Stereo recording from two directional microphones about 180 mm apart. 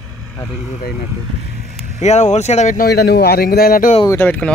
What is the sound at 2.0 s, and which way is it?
Speech, 40° left (ahead or behind).